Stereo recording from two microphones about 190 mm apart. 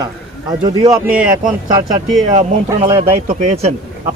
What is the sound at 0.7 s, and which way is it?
Speech, 20° right (ahead or behind).